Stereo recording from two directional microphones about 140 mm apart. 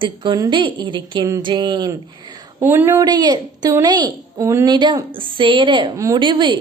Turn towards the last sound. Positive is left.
turn(degrees=-35)  # may be behind; listen again after turning